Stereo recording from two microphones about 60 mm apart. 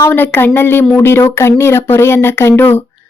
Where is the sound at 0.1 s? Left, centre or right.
Left.